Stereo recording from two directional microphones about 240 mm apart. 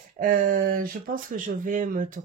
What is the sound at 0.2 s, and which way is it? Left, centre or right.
Speech, right.